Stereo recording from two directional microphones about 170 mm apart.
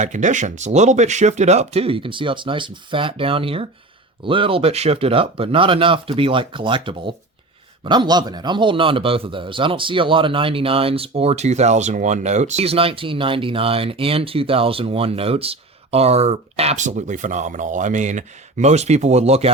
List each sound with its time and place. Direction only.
0.0 s a man's voice: 45° right (ahead or behind)